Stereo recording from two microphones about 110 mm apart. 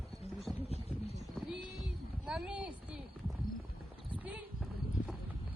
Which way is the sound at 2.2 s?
10° right (ahead or behind).